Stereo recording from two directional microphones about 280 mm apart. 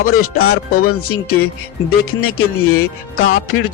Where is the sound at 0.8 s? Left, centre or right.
Left.